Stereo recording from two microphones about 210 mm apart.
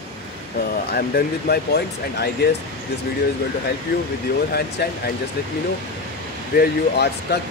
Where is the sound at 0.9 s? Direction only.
50° left (ahead or behind).